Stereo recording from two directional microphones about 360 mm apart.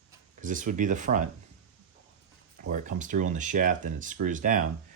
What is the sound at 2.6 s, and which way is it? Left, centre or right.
Speech, right.